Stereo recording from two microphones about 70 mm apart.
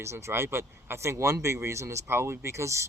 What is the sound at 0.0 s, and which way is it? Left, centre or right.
A man's voice, right.